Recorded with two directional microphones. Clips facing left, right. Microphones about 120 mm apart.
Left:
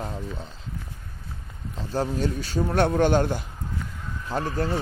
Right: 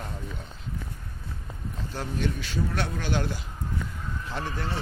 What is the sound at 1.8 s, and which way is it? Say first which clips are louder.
Speech: left 7 dB; 40° left (ahead or behind).